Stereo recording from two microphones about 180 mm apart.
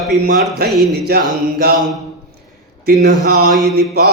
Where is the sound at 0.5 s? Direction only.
65° right (ahead or behind).